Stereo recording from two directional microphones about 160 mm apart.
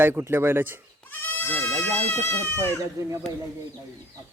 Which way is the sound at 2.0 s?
10° left (ahead or behind).